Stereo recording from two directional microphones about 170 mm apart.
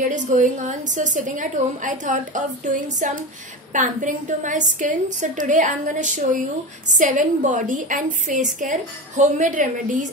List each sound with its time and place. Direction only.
0.0 s a woman's voice: 45° right (ahead or behind)